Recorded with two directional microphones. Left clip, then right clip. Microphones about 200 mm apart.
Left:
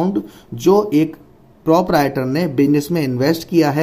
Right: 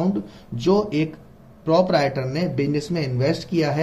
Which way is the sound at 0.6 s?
55° left (ahead or behind).